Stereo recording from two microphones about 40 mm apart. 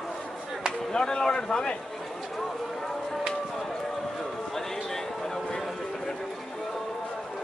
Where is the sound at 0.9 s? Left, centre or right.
Centre.